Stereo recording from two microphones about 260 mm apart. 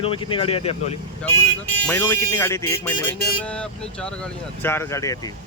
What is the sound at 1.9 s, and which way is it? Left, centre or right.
Speech, centre.